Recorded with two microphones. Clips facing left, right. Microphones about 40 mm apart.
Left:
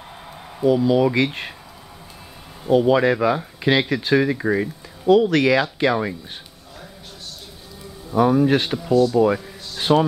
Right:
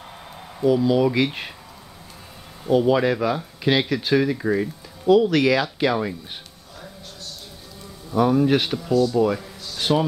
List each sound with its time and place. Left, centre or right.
0.6 s speech: centre
2.6 s speech: centre
8.1 s speech: centre
9.3 s a sound: centre